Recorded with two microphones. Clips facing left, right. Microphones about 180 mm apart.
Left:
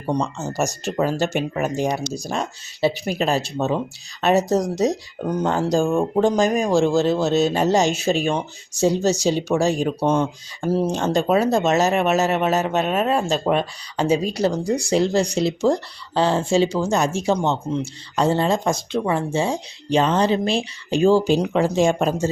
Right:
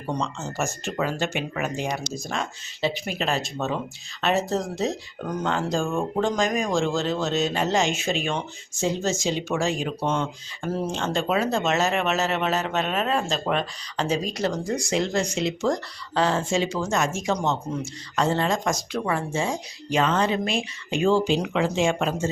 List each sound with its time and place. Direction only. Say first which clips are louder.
0.3 s speech: left 5 dB; 40° left (ahead or behind)
14.0 s speech: left 6 dB; 5° left (ahead or behind)
14.3 s speech: left 5 dB; 35° left (ahead or behind)